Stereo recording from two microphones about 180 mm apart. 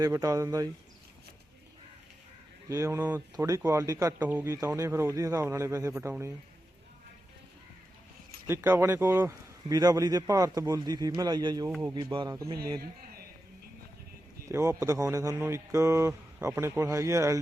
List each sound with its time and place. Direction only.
0.0 s a man's voice: 20° right (ahead or behind)
2.6 s a man's voice: 15° right (ahead or behind)
8.4 s speech: 10° right (ahead or behind)
12.8 s a sound: 60° right (ahead or behind)
14.4 s a man's voice: 15° right (ahead or behind)